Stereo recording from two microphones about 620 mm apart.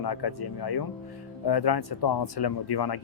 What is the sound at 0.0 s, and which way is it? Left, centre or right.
Speech, left.